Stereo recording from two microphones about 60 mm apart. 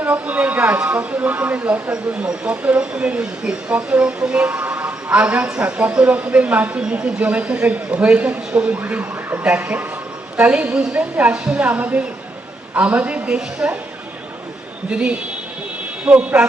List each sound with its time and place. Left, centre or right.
0.0 s speech: right
14.8 s speech: centre